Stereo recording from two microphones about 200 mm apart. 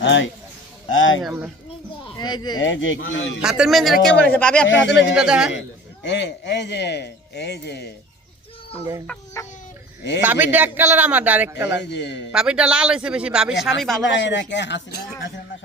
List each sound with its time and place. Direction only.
0.0 s speech: 70° left (ahead or behind)
2.1 s speech: 20° left (ahead or behind)
2.6 s speech: 70° left (ahead or behind)
3.4 s a man's voice: centre (ahead or behind)
4.7 s a man's voice: 65° left (ahead or behind)
5.1 s a man's voice: 5° right (ahead or behind)
5.5 s a man's voice: 60° left (ahead or behind)
9.0 s speech: 15° left (ahead or behind)
10.2 s speech: 10° right (ahead or behind)
11.8 s a man's voice: 60° left (ahead or behind)
12.3 s a man's voice: 5° right (ahead or behind)
14.0 s a man's voice: 65° left (ahead or behind)